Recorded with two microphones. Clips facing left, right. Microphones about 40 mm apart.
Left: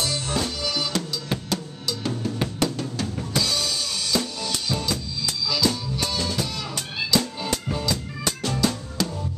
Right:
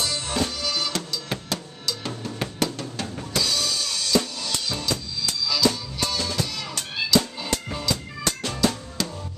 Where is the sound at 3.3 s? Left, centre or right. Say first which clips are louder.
Right 1 dB; centre.